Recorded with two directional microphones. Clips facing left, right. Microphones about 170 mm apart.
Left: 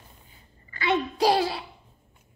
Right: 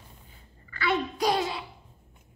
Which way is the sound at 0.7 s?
20° left (ahead or behind).